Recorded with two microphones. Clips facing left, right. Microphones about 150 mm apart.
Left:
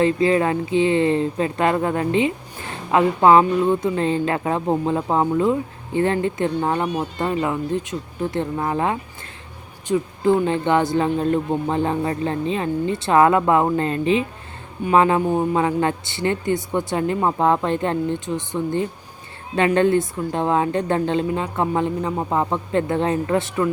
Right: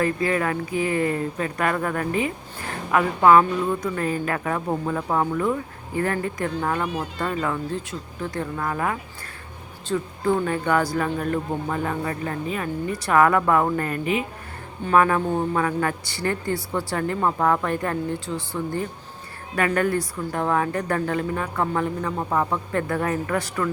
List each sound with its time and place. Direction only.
0.0 s speech: 25° left (ahead or behind)